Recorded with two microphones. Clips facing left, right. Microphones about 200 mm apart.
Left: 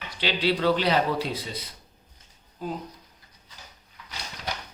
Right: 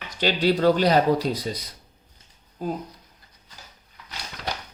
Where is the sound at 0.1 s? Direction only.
45° right (ahead or behind).